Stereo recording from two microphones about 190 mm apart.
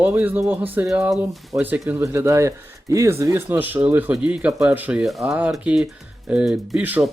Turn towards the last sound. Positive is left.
turn(degrees=-10)  # may be behind; listen again after turning